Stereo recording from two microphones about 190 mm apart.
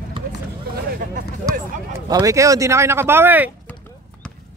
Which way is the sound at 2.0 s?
20° right (ahead or behind).